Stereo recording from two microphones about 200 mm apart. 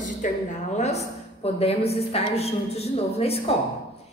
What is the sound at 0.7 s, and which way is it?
A woman's voice, 35° left (ahead or behind).